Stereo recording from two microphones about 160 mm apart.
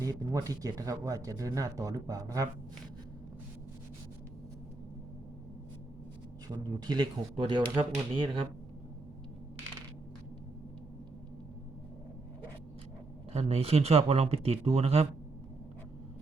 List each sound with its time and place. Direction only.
0.0 s speech: 20° right (ahead or behind)
6.5 s speech: 30° right (ahead or behind)
13.3 s speech: 40° right (ahead or behind)